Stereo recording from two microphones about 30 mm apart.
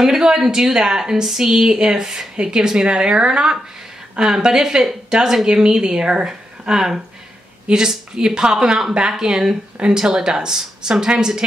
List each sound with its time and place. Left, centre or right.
0.0 s speech: centre
1.8 s a woman's voice: right